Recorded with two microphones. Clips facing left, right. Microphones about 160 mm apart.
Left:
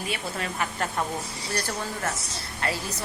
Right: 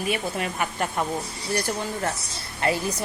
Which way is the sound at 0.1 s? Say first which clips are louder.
Right 5 dB; 20° right (ahead or behind).